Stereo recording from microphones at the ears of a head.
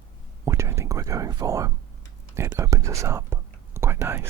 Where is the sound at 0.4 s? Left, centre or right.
Right.